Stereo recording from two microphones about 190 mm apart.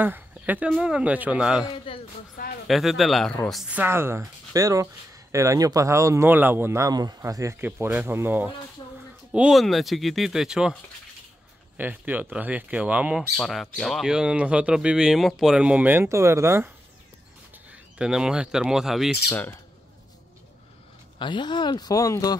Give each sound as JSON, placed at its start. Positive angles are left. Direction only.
{"t": 0.0, "sound": "speech", "side_deg": -10}
{"t": 2.4, "sound": "speech", "side_deg": 50}
{"t": 2.7, "sound": "speech", "side_deg": 0}
{"t": 17.9, "sound": "speech", "side_deg": -5}
{"t": 21.2, "sound": "speech", "side_deg": 25}